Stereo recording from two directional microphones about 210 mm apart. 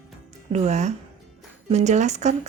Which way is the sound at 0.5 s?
35° right (ahead or behind).